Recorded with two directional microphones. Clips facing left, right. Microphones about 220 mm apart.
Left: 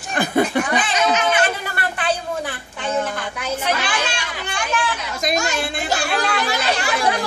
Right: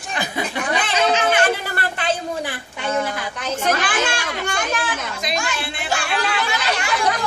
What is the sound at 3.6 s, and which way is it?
Speech, 50° right (ahead or behind).